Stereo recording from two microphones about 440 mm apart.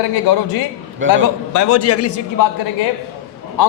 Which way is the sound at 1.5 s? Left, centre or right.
Left.